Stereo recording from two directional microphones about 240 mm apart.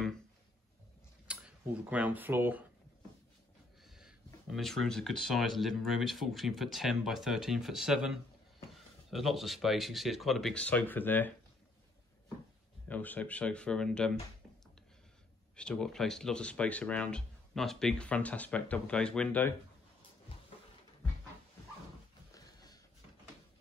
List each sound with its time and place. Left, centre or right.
1.2 s speech: centre
3.8 s speech: centre
12.8 s speech: centre
15.5 s speech: centre
22.3 s a sound: centre